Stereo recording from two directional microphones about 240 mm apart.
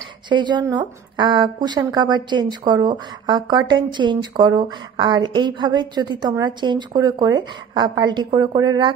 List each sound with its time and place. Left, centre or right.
0.3 s a woman's voice: centre